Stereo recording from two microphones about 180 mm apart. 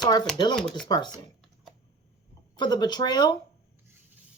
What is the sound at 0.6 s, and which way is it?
Speech, 5° left (ahead or behind).